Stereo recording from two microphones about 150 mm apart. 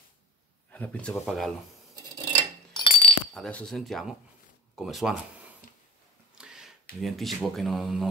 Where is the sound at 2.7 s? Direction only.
35° left (ahead or behind).